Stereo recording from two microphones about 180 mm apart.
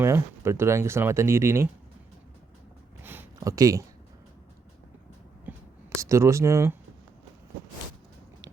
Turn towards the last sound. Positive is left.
turn(degrees=-15)  # may be behind; listen again after turning